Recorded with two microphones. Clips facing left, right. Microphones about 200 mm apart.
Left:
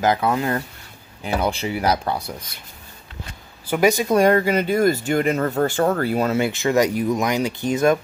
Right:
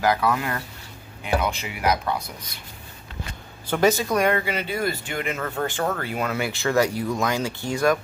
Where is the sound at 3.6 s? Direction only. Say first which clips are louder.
Left 2 dB; 10° left (ahead or behind).